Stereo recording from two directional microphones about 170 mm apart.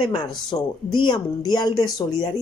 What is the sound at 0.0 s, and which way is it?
Speech, 25° left (ahead or behind).